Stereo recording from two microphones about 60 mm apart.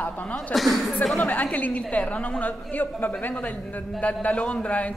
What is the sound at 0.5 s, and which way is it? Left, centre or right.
Speech, centre.